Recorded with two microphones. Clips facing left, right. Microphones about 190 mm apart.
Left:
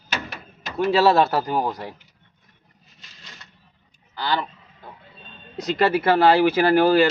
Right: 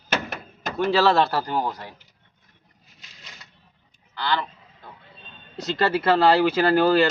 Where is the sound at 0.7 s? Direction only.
5° left (ahead or behind).